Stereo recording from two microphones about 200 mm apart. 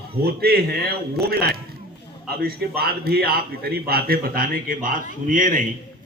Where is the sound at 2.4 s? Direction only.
50° right (ahead or behind).